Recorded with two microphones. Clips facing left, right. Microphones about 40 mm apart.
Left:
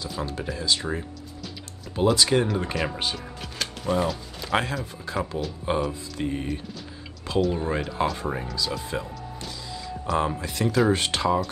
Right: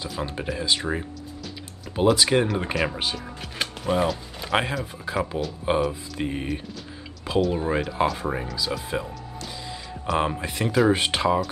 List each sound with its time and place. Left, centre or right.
0.2 s speech: right
3.5 s speech: right
7.5 s speech: centre
10.0 s speech: right